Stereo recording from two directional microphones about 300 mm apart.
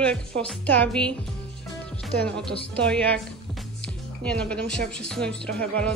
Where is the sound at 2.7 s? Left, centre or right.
Centre.